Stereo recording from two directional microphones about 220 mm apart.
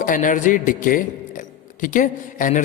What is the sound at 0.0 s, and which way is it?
A man's voice, 35° left (ahead or behind).